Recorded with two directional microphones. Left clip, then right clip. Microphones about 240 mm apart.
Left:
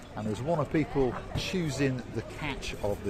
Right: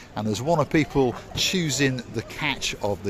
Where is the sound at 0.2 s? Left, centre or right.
Right.